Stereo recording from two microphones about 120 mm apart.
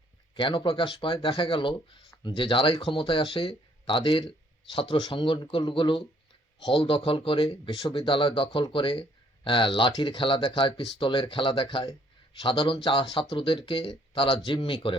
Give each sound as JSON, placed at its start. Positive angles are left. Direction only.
{"t": 0.3, "sound": "speech", "side_deg": 45}
{"t": 8.4, "sound": "speech", "side_deg": 30}
{"t": 8.7, "sound": "speech", "side_deg": 45}